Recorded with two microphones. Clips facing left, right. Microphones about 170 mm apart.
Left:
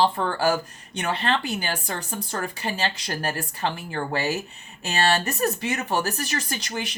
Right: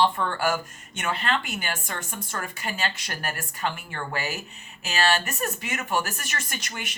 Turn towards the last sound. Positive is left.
turn(degrees=35)  # may be behind; listen again after turning